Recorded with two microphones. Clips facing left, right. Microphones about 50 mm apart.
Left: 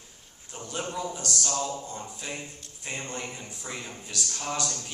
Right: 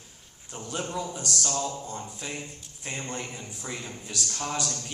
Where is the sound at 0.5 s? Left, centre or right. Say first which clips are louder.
Right 1 dB; centre.